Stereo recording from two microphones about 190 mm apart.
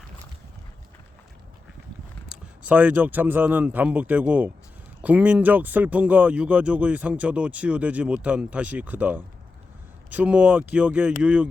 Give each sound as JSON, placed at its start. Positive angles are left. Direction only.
{"t": 2.3, "sound": "speech", "side_deg": -5}